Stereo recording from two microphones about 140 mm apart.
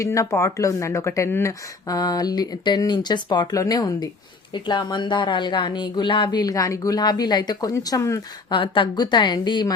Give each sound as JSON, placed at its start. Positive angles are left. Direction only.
{"t": 0.0, "sound": "speech", "side_deg": 20}
{"t": 8.5, "sound": "speech", "side_deg": 35}